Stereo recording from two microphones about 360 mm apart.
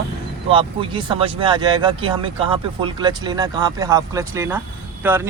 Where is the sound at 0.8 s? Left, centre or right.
Centre.